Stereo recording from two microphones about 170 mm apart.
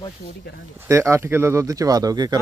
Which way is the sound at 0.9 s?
15° right (ahead or behind).